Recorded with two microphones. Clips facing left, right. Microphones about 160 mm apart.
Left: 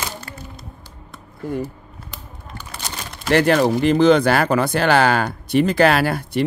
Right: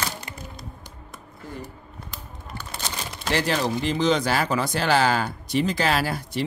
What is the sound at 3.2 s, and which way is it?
Speech, 60° left (ahead or behind).